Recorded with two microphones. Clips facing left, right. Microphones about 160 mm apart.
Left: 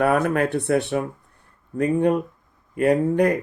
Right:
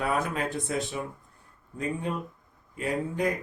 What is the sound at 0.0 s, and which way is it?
Speech, 60° left (ahead or behind).